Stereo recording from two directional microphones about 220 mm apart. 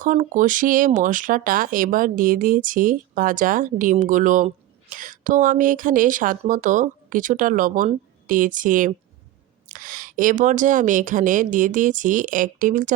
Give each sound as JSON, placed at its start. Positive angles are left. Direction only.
{"t": 0.0, "sound": "speech", "side_deg": -35}